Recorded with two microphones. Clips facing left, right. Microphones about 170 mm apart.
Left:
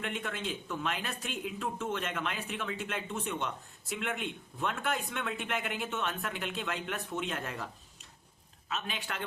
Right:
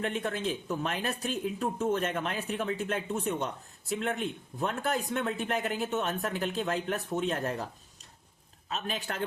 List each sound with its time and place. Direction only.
0.0 s speech: 35° right (ahead or behind)
8.7 s speech: 40° right (ahead or behind)